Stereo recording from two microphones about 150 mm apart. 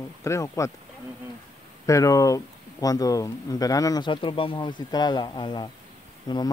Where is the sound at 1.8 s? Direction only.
20° left (ahead or behind).